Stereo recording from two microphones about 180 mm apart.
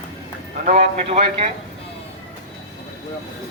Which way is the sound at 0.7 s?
40° right (ahead or behind).